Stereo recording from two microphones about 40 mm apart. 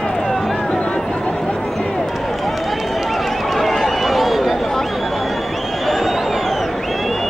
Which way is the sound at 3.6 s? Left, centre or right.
Centre.